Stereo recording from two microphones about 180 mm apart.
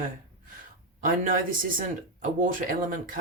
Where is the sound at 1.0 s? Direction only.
50° right (ahead or behind).